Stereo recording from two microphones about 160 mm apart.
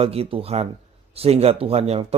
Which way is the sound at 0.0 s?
40° right (ahead or behind).